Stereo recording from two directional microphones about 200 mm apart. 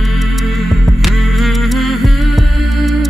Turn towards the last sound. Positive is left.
turn(degrees=0)  # may be behind; listen again after turning